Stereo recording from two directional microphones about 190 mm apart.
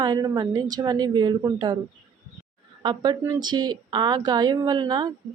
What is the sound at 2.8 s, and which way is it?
Speech, 20° right (ahead or behind).